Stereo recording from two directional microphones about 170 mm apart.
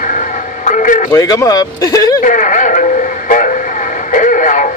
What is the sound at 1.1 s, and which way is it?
Speech, 20° left (ahead or behind).